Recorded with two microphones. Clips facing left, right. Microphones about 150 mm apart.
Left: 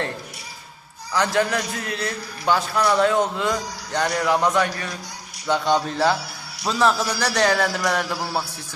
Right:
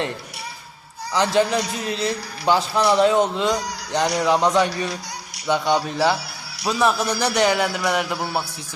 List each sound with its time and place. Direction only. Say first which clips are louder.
1.1 s speech: right 2 dB; 20° right (ahead or behind)
7.2 s speech: right 3 dB; 20° right (ahead or behind)
7.5 s speech: right 1 dB; centre (ahead or behind)